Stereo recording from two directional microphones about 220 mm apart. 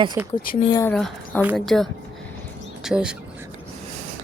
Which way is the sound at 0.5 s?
25° left (ahead or behind).